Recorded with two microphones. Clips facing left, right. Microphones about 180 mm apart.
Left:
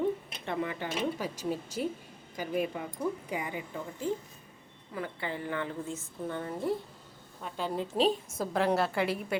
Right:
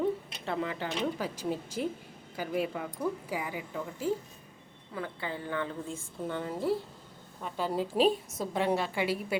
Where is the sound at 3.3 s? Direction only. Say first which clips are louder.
Even; 5° right (ahead or behind).